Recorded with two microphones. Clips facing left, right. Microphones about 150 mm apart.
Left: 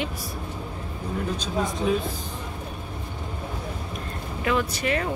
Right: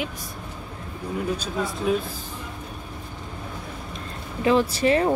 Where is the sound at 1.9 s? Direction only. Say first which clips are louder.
Right 2 dB; centre (ahead or behind).